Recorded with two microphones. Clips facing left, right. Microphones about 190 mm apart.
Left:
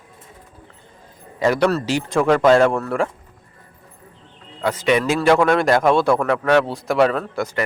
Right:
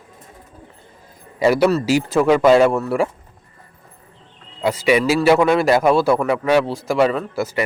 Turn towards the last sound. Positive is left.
turn(degrees=-5)  # may be behind; listen again after turning